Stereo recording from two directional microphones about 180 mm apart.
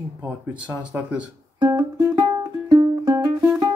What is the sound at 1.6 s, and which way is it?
Music, 20° right (ahead or behind).